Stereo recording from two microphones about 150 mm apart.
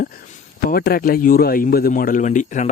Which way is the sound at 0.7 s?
85° left.